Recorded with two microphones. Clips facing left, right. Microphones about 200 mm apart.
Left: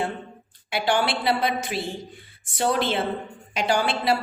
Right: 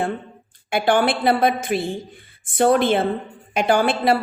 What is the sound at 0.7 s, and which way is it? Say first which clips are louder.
A woman's voice: right 5 dB; 50° right (ahead or behind).